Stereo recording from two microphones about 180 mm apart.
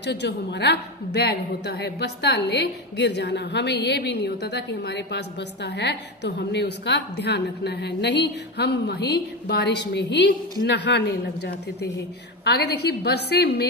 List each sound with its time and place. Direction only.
0.0 s a woman's voice: 70° left (ahead or behind)